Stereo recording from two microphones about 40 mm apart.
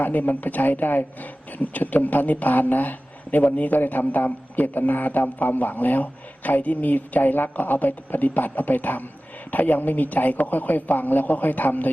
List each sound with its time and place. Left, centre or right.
0.0 s a man's voice: left